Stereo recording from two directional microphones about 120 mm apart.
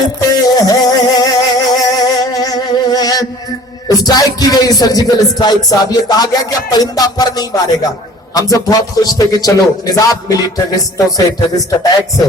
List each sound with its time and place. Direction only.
0.4 s music: 35° left (ahead or behind)
3.8 s a man's voice: 30° left (ahead or behind)